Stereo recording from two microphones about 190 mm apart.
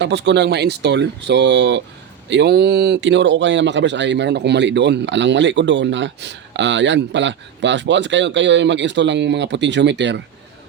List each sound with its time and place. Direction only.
0.0 s speech: 65° right (ahead or behind)